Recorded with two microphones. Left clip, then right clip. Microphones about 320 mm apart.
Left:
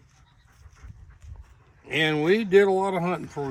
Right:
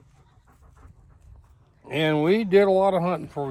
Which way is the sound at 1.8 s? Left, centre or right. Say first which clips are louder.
Even; centre.